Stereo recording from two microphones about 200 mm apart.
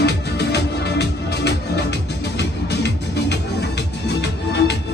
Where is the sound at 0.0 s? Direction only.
55° left (ahead or behind).